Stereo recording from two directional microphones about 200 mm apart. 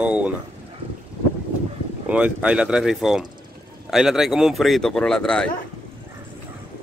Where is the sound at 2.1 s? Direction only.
5° right (ahead or behind).